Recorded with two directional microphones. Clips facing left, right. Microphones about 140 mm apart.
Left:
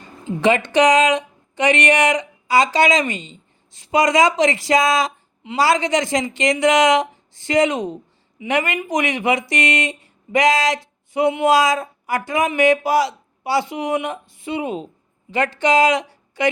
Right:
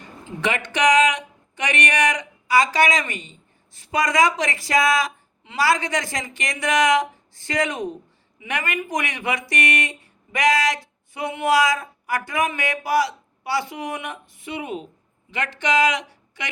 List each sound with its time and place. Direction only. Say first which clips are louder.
0.7 s speech: left 1 dB; 30° left (ahead or behind)